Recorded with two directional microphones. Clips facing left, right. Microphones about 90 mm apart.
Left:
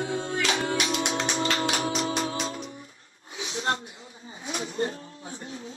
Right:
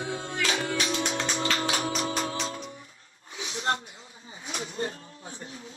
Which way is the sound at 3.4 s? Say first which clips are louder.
Left 1 dB; 35° left (ahead or behind).